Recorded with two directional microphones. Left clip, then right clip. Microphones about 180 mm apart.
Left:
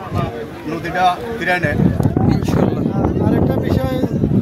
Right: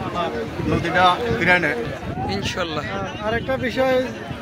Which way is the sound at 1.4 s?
45° left (ahead or behind).